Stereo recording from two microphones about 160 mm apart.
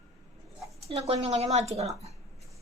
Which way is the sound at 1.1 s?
40° right (ahead or behind).